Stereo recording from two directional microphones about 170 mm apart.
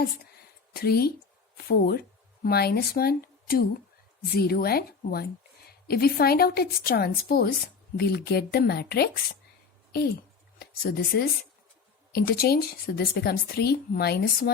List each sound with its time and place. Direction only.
0.7 s speech: 65° left (ahead or behind)
10.6 s a woman's voice: 65° left (ahead or behind)